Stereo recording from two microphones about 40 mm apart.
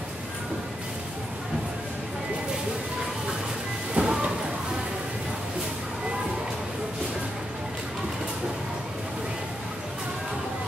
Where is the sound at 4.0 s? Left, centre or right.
Right.